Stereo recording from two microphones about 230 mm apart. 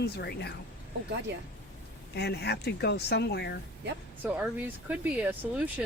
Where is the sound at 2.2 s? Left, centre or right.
Left.